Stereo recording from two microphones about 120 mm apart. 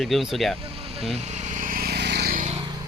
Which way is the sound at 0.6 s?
55° right (ahead or behind).